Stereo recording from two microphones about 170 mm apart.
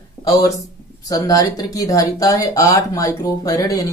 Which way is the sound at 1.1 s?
20° left (ahead or behind).